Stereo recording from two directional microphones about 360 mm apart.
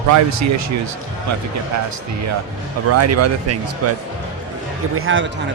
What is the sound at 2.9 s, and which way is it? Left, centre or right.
Speech, right.